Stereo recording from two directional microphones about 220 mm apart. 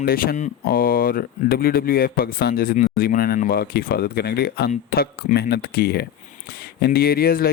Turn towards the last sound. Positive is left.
turn(degrees=45)  # may be behind; listen again after turning